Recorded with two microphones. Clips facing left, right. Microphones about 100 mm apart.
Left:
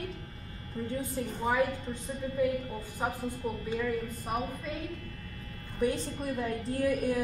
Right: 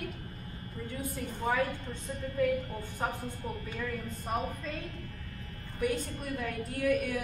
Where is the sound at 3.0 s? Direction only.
10° left (ahead or behind).